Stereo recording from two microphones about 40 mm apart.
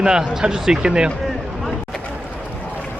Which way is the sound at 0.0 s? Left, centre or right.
Centre.